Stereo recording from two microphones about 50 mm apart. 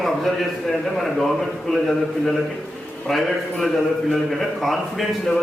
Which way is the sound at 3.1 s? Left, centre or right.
Centre.